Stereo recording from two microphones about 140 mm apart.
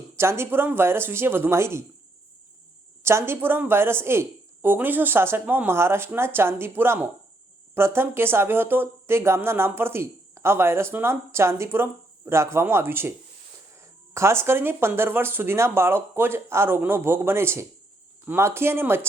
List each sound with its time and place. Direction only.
0.2 s speech: 20° right (ahead or behind)
3.0 s speech: 20° right (ahead or behind)